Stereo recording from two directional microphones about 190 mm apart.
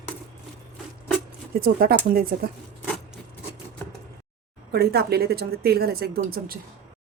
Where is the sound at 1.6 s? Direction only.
50° right (ahead or behind).